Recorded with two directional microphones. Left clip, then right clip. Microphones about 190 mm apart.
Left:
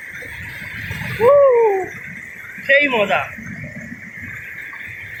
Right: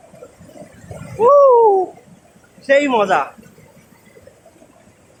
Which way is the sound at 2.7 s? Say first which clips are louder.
Right 1 dB; 20° right (ahead or behind).